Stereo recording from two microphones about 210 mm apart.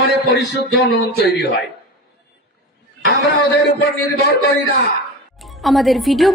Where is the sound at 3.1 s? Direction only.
55° left (ahead or behind).